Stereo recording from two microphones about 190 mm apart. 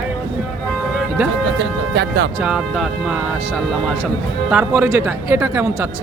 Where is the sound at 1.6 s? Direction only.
65° right (ahead or behind).